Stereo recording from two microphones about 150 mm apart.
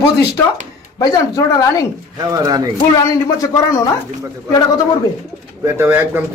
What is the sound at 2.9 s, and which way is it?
Speech, 20° left (ahead or behind).